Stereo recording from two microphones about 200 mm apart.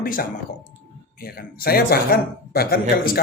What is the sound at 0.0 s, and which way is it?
Speech, 50° left (ahead or behind).